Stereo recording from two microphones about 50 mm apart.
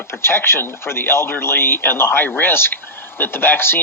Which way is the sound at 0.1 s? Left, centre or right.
Left.